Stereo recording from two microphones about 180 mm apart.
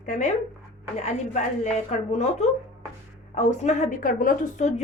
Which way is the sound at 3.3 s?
40° left (ahead or behind).